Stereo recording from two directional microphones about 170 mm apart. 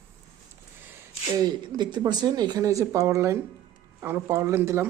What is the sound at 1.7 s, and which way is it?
Speech, 25° right (ahead or behind).